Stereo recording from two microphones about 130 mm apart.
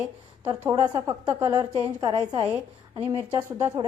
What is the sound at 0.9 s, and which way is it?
A woman's voice, 30° right (ahead or behind).